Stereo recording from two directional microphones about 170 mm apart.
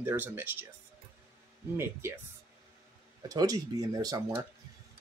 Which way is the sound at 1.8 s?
15° right (ahead or behind).